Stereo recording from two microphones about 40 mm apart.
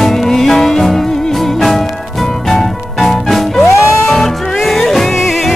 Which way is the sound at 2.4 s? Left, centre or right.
Centre.